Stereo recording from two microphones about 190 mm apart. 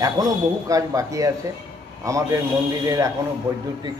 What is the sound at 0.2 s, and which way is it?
A man's voice, 20° right (ahead or behind).